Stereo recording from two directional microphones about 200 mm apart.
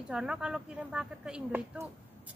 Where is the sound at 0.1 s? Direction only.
5° right (ahead or behind).